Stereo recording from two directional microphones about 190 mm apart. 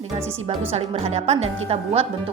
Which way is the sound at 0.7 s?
30° right (ahead or behind).